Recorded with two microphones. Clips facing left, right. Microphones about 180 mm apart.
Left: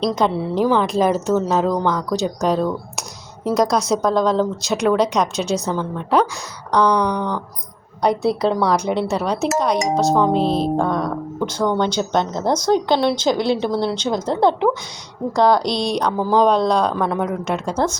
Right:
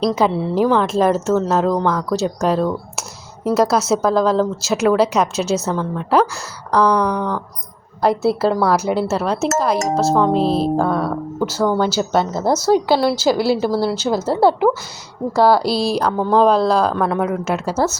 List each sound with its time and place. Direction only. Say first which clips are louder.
0.0 s speech: right 2 dB; centre (ahead or behind)